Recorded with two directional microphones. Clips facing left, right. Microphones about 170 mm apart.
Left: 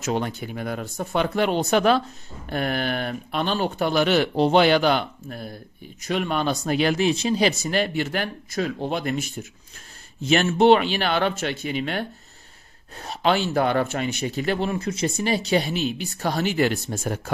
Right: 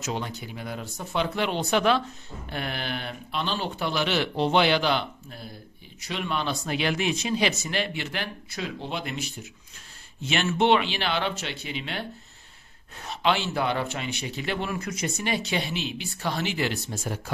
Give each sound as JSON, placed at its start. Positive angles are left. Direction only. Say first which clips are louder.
{"t": 0.0, "sound": "speech", "louder": "left 6 dB", "side_deg": 55}
{"t": 14.7, "sound": "speech", "louder": "left 5 dB", "side_deg": 30}